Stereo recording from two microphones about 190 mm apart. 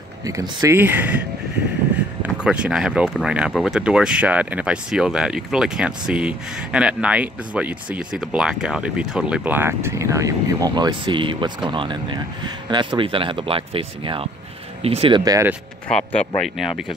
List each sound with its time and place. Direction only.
0.2 s speech: 20° right (ahead or behind)
2.2 s speech: 5° right (ahead or behind)
15.9 s speech: 5° left (ahead or behind)